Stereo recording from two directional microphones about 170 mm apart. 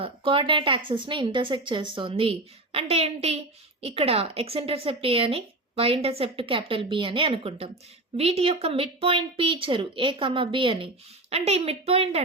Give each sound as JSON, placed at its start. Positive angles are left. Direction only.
{"t": 0.0, "sound": "a woman's voice", "side_deg": -30}